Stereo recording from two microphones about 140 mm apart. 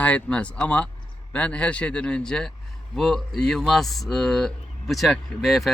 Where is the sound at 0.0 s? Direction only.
10° left (ahead or behind).